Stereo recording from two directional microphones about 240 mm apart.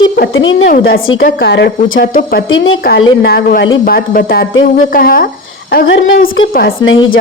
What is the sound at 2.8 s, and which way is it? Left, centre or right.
A woman's voice, left.